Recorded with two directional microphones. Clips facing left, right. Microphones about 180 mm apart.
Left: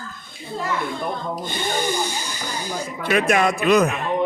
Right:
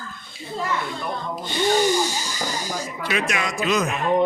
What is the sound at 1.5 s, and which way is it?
Speech, 50° left (ahead or behind).